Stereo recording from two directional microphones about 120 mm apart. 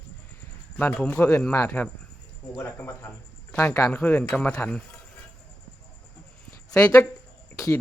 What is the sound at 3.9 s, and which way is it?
Speech, 10° left (ahead or behind).